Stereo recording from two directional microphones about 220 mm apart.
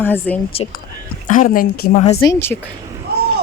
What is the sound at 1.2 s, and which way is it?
Speech, 35° left (ahead or behind).